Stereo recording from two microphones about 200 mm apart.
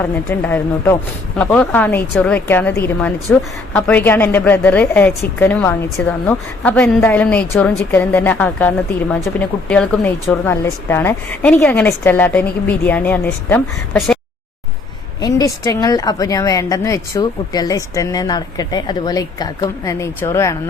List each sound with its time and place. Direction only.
0.0 s speech: 10° left (ahead or behind)
15.2 s speech: 15° left (ahead or behind)